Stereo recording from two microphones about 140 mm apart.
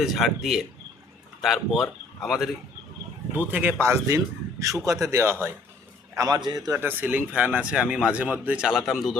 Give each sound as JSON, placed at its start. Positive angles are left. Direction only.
{"t": 0.0, "sound": "speech", "side_deg": 0}
{"t": 3.3, "sound": "speech", "side_deg": -10}
{"t": 6.7, "sound": "speech", "side_deg": -15}